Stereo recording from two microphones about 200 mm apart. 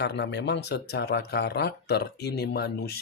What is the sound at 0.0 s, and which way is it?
Speech, 55° left (ahead or behind).